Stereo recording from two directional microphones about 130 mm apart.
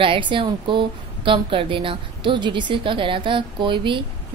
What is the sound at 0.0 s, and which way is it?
A woman's voice, 40° right (ahead or behind).